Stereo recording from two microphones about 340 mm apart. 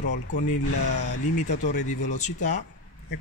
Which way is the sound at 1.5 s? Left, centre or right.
Left.